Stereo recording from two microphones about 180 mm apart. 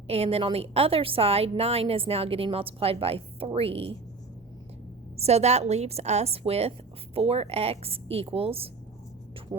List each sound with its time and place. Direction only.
0.1 s a woman's voice: 35° right (ahead or behind)
5.1 s a woman's voice: 35° right (ahead or behind)